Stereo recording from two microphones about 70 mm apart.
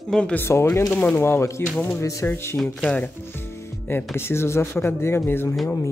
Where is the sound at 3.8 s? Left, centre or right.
Left.